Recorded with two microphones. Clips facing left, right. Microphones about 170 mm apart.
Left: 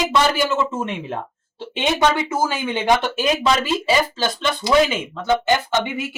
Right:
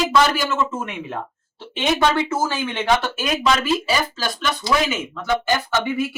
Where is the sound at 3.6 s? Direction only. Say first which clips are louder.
Left 2 dB; 25° left (ahead or behind).